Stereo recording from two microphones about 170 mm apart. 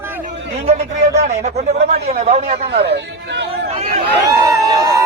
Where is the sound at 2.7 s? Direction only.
75° right (ahead or behind).